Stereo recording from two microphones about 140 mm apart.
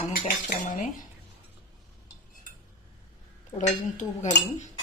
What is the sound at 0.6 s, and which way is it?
Cutlery, 70° left (ahead or behind).